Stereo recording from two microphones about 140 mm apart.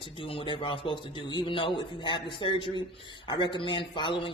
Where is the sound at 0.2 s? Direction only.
40° left (ahead or behind).